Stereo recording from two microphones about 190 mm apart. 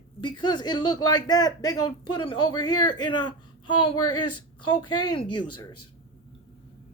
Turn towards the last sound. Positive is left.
turn(degrees=25)  # may be behind; listen again after turning